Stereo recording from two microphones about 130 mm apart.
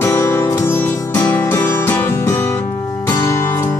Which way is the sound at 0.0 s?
20° left (ahead or behind).